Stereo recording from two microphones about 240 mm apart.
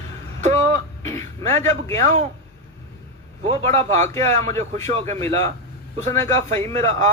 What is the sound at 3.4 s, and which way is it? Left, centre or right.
A man's voice, right.